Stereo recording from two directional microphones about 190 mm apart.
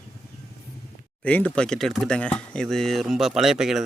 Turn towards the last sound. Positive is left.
turn(degrees=0)  # may be behind; listen again after turning